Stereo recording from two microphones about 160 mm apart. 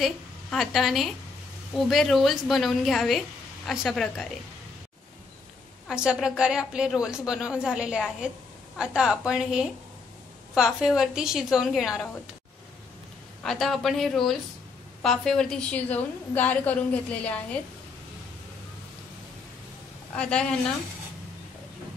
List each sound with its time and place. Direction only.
0.0 s a woman's voice: centre (ahead or behind)
5.9 s a woman's voice: 5° right (ahead or behind)
13.4 s a woman's voice: centre (ahead or behind)
20.2 s a woman's voice: 5° left (ahead or behind)